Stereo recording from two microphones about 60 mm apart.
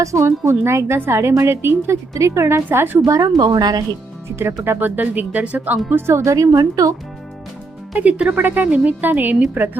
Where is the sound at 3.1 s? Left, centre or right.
Right.